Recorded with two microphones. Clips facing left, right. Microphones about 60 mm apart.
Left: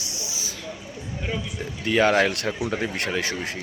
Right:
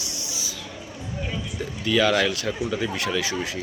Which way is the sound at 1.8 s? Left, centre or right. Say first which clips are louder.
Left 1 dB; left.